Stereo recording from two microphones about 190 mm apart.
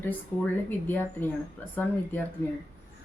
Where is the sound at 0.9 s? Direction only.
10° left (ahead or behind).